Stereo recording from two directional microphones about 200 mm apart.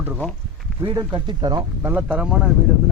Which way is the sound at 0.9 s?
20° right (ahead or behind).